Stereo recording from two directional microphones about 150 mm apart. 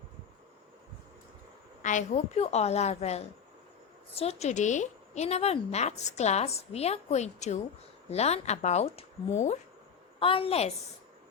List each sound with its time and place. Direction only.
1.8 s a woman's voice: 55° left (ahead or behind)
10.2 s a woman's voice: 35° left (ahead or behind)